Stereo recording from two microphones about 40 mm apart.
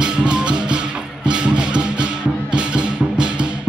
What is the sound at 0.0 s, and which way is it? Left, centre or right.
Music, right.